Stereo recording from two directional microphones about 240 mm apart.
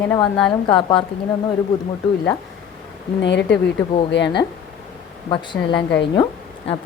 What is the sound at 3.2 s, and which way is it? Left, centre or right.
Speech, left.